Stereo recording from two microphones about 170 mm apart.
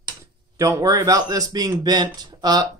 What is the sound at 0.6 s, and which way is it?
Speech, 20° right (ahead or behind).